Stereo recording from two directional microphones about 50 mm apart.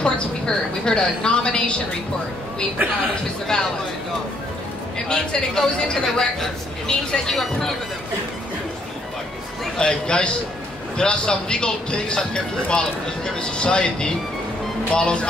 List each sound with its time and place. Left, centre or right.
0.0 s speech: centre
3.5 s speech: centre
4.9 s speech: centre
9.8 s speech: centre